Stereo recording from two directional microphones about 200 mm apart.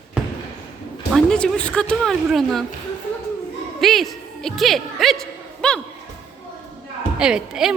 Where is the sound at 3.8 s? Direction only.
Centre (ahead or behind).